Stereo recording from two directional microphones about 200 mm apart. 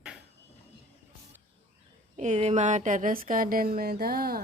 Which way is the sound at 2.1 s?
35° right (ahead or behind).